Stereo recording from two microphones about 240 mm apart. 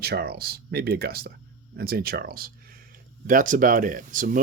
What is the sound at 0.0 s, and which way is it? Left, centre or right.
Speech, right.